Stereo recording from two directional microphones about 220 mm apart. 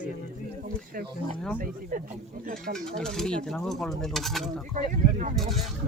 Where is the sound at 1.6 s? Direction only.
40° right (ahead or behind).